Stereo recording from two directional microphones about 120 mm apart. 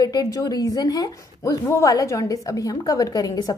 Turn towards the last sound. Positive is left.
turn(degrees=30)  # may be behind; listen again after turning